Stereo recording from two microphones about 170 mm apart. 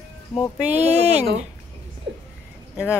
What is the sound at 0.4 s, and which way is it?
Speech, 5° right (ahead or behind).